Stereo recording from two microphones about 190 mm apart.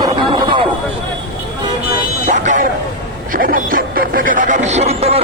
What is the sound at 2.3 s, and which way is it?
Vehicle, 40° right (ahead or behind).